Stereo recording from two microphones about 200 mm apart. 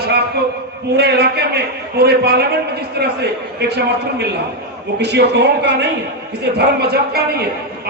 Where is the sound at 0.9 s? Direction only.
55° right (ahead or behind).